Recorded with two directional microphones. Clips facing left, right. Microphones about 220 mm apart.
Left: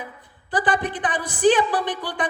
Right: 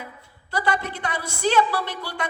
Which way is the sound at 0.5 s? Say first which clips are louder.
Left 3 dB; 15° left (ahead or behind).